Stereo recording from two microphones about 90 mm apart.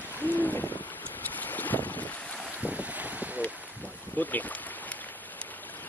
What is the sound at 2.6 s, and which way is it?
Boat, 15° right (ahead or behind).